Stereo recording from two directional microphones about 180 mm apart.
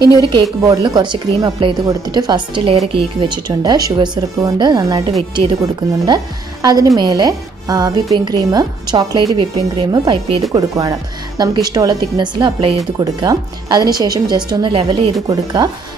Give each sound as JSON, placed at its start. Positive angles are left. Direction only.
{"t": 0.3, "sound": "a woman's voice", "side_deg": -25}